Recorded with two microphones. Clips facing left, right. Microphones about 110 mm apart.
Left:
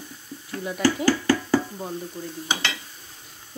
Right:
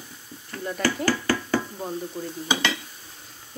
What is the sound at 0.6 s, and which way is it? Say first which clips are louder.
Speech: left 3 dB; 5° left (ahead or behind).